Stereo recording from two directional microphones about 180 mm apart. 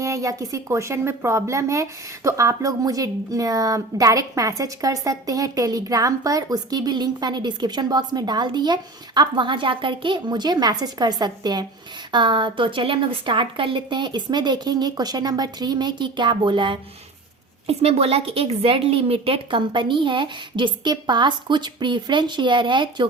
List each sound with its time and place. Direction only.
0.0 s speech: 20° right (ahead or behind)